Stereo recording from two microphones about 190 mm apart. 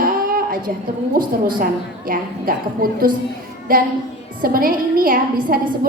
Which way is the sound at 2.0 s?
50° right (ahead or behind).